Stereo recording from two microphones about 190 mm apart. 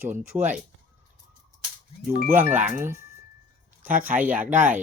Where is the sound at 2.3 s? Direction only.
10° right (ahead or behind).